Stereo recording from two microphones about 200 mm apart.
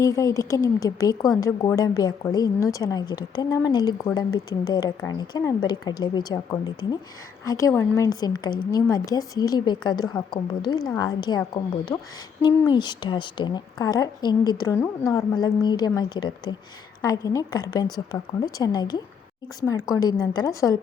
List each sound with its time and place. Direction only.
0.0 s a woman's voice: 15° left (ahead or behind)